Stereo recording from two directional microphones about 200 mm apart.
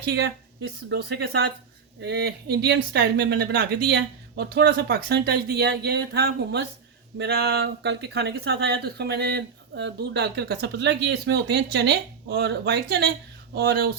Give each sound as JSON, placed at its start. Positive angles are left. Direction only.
{"t": 0.0, "sound": "speech", "side_deg": -55}
{"t": 7.2, "sound": "a sound", "side_deg": -55}
{"t": 7.6, "sound": "speech", "side_deg": -60}